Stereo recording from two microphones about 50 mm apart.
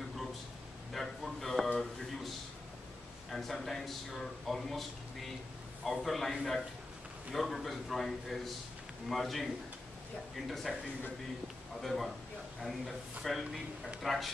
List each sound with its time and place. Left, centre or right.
0.9 s a sound: centre
3.3 s speech: centre
5.9 s speech: centre
11.8 s speech: centre